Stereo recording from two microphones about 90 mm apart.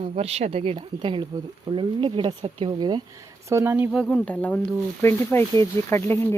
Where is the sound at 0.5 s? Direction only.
80° right.